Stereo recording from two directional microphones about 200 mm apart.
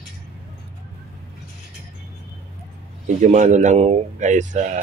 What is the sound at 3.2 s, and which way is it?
Speech, 35° right (ahead or behind).